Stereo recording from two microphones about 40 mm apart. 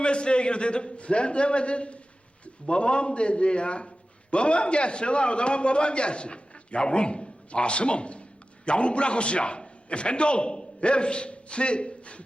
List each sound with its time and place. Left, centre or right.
0.0 s a man's voice: left